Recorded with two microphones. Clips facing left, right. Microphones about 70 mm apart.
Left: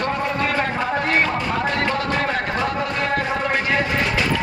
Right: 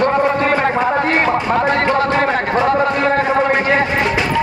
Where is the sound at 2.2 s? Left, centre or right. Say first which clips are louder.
Right 6 dB; right.